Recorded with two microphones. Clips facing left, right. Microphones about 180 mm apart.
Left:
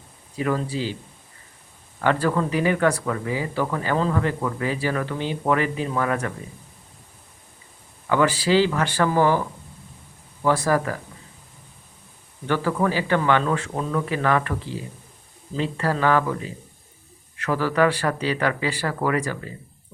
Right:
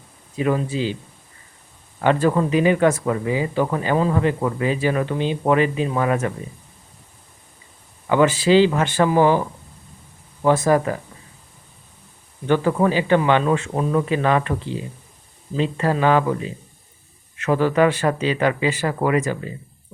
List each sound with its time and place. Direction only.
0.3 s speech: 20° right (ahead or behind)
2.0 s speech: 20° right (ahead or behind)
8.0 s speech: 20° right (ahead or behind)
10.4 s speech: 20° right (ahead or behind)
12.5 s speech: 20° right (ahead or behind)